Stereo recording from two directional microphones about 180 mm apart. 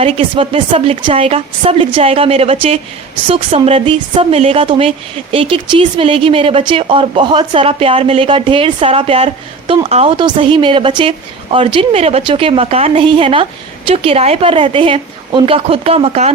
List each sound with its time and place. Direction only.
0.0 s a woman's voice: 30° right (ahead or behind)